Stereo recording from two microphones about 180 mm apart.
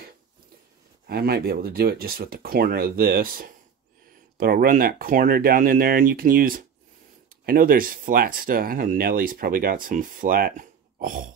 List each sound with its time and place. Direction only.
1.0 s speech: 60° right (ahead or behind)